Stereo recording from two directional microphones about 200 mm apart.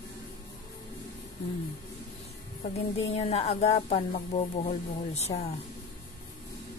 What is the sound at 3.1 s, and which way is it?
Speech, 30° left (ahead or behind).